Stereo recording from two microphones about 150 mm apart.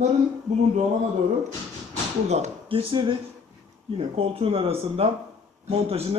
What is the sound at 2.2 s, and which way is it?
Speech, 45° right (ahead or behind).